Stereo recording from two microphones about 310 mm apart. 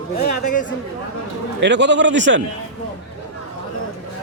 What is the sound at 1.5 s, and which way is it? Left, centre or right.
Speech, right.